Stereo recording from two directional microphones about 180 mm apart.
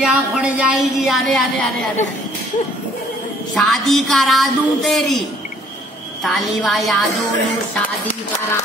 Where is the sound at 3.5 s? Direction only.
Centre (ahead or behind).